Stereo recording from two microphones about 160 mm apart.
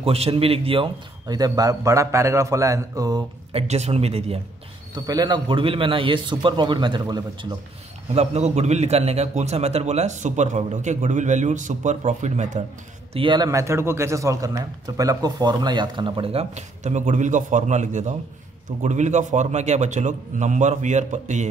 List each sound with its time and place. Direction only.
0.0 s speech: 40° right (ahead or behind); by 3.3 s 25° right (ahead or behind)
3.5 s speech: 40° right (ahead or behind)
4.9 s speech: 25° right (ahead or behind)
8.1 s a man's voice: 45° right (ahead or behind)
13.1 s a man's voice: 30° right (ahead or behind); by 21.5 s 50° right (ahead or behind)